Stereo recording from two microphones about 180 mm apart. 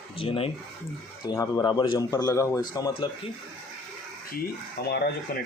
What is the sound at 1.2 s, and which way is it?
Speech, 20° left (ahead or behind).